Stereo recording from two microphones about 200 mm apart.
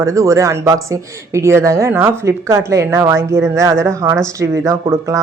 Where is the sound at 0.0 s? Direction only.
15° right (ahead or behind).